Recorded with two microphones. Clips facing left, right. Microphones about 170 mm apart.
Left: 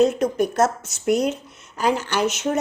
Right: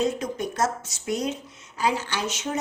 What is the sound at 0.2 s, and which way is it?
A woman's voice, 65° left (ahead or behind).